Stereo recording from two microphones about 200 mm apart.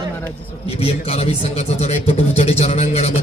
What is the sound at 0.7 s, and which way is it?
Speech, 30° left (ahead or behind).